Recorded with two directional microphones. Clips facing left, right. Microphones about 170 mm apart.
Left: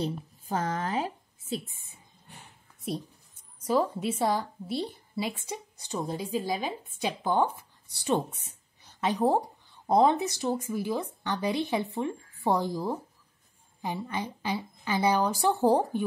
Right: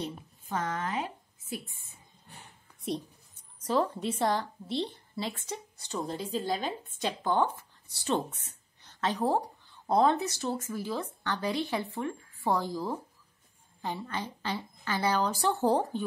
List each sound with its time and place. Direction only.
0.0 s a woman's voice: 35° left (ahead or behind)
3.6 s a woman's voice: 10° left (ahead or behind)